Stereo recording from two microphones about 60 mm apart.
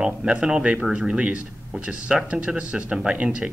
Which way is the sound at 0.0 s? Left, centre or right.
Centre.